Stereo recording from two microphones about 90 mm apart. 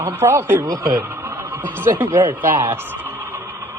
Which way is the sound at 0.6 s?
40° right (ahead or behind).